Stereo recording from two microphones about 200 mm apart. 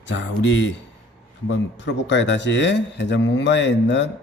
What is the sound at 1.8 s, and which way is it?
A man's voice, 60° left (ahead or behind).